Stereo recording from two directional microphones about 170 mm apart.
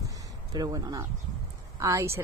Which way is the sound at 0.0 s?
20° right (ahead or behind).